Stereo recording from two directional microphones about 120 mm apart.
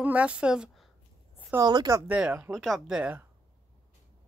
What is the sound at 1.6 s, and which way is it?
Speech, 35° right (ahead or behind).